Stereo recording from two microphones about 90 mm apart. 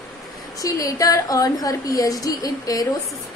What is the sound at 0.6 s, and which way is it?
A woman's voice, 40° left (ahead or behind).